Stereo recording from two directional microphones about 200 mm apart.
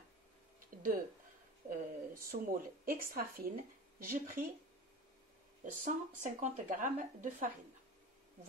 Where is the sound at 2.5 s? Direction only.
45° right (ahead or behind).